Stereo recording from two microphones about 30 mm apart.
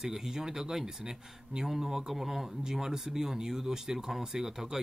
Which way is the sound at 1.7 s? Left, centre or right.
Centre.